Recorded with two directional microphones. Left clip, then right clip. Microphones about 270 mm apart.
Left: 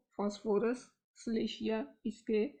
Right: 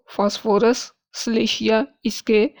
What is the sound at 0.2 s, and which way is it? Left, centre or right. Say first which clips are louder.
Speech: right 16 dB; right.